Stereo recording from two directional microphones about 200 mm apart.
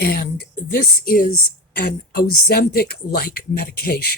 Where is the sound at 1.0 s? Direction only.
45° left (ahead or behind).